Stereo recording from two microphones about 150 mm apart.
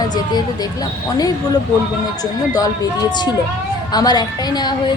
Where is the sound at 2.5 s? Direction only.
25° left (ahead or behind).